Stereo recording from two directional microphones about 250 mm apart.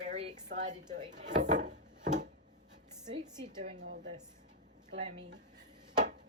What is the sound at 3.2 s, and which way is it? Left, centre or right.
Speech, centre.